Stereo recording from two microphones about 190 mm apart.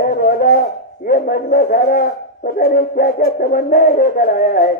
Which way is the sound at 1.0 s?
50° left (ahead or behind).